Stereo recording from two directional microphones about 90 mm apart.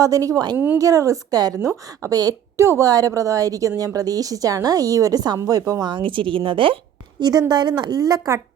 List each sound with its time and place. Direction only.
0.0 s a woman's voice: 40° right (ahead or behind)
0.5 s speech: 20° right (ahead or behind)
0.8 s a woman's voice: 40° right (ahead or behind)
5.9 s a woman's voice: 70° right (ahead or behind)
7.2 s a woman's voice: 50° right (ahead or behind)